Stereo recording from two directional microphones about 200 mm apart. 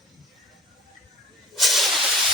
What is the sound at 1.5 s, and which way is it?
Hiss, centre (ahead or behind).